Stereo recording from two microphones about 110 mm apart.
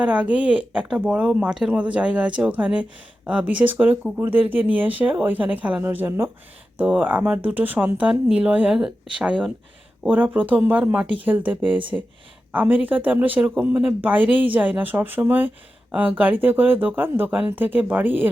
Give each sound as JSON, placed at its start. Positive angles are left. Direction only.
{"t": 0.0, "sound": "speech", "side_deg": -10}